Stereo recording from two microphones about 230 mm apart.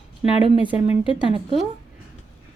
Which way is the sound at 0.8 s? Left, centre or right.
Left.